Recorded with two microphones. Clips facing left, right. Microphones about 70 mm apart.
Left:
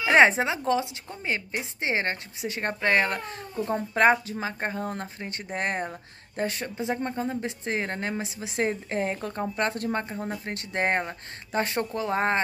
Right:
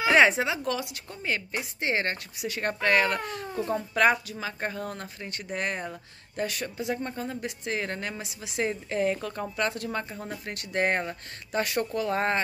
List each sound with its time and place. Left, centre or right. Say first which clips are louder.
0.1 s speech: left 3 dB; left